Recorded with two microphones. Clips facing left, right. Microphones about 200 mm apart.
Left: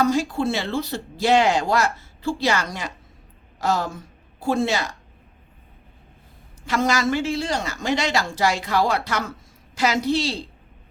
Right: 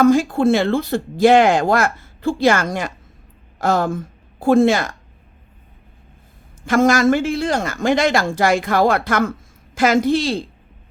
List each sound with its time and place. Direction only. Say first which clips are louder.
0.0 s a woman's voice: right 7 dB; 50° right (ahead or behind)
6.7 s speech: right 7 dB; 50° right (ahead or behind)